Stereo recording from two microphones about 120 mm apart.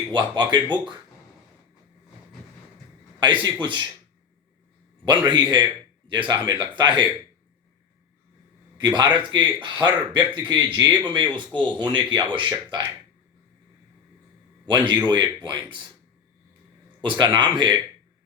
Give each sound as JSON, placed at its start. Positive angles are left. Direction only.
{"t": 0.1, "sound": "speech", "side_deg": -40}
{"t": 3.2, "sound": "speech", "side_deg": -40}
{"t": 5.0, "sound": "speech", "side_deg": -40}
{"t": 8.8, "sound": "speech", "side_deg": -40}
{"t": 14.7, "sound": "speech", "side_deg": -40}
{"t": 17.0, "sound": "speech", "side_deg": -40}